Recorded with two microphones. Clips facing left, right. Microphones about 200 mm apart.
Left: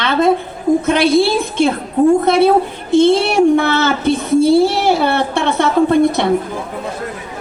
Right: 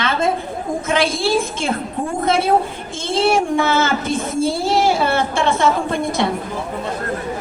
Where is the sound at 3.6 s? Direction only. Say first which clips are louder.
Left 2 dB; 65° left (ahead or behind).